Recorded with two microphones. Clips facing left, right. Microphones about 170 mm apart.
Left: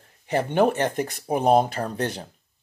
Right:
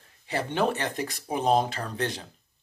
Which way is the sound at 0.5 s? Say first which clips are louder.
Left 6 dB; 55° left (ahead or behind).